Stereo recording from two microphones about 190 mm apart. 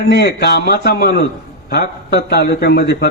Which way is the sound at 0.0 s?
60° left (ahead or behind).